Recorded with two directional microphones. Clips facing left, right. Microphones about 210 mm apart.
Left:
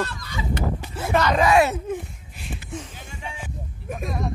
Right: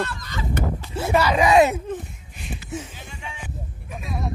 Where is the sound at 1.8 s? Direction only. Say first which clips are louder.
Left 1 dB; centre (ahead or behind).